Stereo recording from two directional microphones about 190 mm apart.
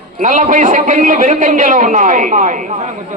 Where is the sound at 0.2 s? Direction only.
40° right (ahead or behind).